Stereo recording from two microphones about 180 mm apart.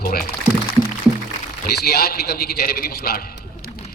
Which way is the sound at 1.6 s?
60° left (ahead or behind).